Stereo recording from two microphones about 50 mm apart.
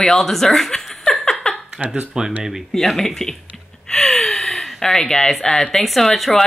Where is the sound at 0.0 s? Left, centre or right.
Centre.